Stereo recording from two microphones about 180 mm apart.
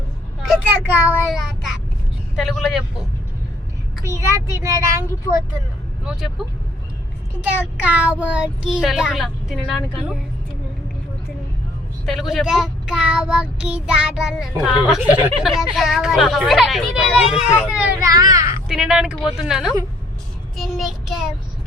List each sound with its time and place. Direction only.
0.4 s a child's voice: 10° right (ahead or behind)
4.0 s a child's voice: 15° right (ahead or behind)
6.1 s speech: 5° right (ahead or behind)
7.4 s speech: 10° right (ahead or behind)
12.0 s speech: centre (ahead or behind)
18.0 s a child's voice: 20° right (ahead or behind)
18.7 s speech: 5° right (ahead or behind)